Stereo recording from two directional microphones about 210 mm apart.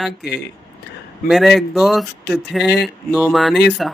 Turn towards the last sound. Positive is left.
turn(degrees=0)  # may be behind; listen again after turning